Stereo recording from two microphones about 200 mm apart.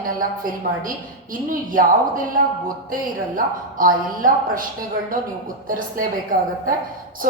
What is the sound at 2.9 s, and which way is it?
Speech, 45° right (ahead or behind).